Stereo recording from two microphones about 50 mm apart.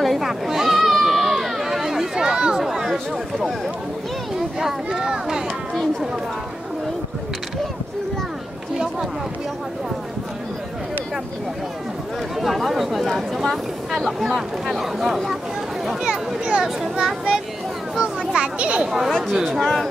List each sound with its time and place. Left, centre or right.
0.0 s a sound: centre
4.8 s speech: centre
12.4 s speech: centre
16.1 s speech: right
18.9 s speech: centre
19.6 s speech: centre